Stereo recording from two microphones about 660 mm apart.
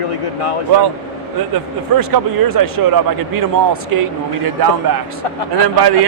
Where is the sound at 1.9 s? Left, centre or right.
Right.